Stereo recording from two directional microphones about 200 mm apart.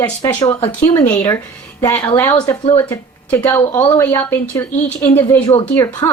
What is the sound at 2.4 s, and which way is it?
Speech, 25° left (ahead or behind).